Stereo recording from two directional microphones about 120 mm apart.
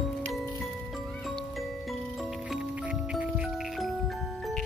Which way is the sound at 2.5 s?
5° right (ahead or behind).